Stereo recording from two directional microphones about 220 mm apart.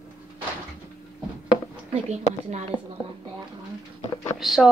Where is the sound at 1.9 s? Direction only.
30° right (ahead or behind).